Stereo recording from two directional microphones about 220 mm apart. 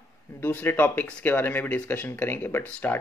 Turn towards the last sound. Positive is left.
turn(degrees=10)  # may be behind; listen again after turning